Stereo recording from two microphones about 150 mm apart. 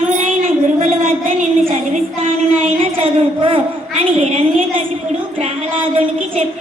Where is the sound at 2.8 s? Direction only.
40° right (ahead or behind).